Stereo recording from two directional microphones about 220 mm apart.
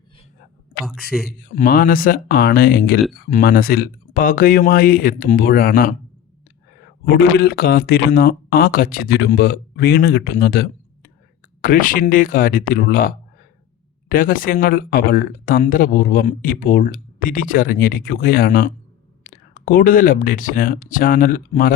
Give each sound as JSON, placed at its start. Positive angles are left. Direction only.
{"t": 0.9, "sound": "a man's voice", "side_deg": 0}
{"t": 1.3, "sound": "speech", "side_deg": 40}
{"t": 7.2, "sound": "speech", "side_deg": 45}